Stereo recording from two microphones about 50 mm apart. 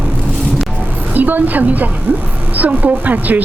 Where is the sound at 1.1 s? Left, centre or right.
Right.